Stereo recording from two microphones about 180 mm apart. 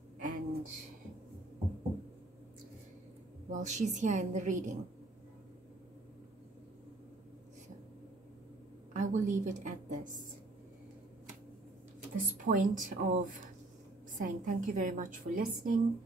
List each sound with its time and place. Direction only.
0.2 s a sound: 50° right (ahead or behind)
3.4 s a woman's voice: 40° right (ahead or behind)
8.9 s a woman's voice: 45° right (ahead or behind)
12.4 s a woman's voice: 45° right (ahead or behind)